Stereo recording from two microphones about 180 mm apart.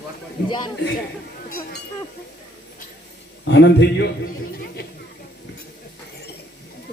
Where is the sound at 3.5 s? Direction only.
80° left.